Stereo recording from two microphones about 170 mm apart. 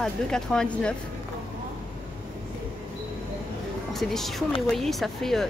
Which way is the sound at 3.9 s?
Centre (ahead or behind).